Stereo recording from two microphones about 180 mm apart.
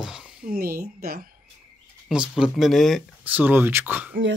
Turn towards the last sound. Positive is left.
turn(degrees=-10)  # may be behind; listen again after turning